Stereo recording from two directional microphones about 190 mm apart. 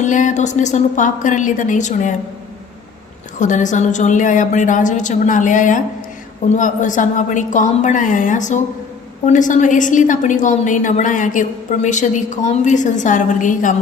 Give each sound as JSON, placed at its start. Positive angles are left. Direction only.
{"t": 0.0, "sound": "a woman's voice", "side_deg": 40}
{"t": 3.3, "sound": "a woman's voice", "side_deg": 40}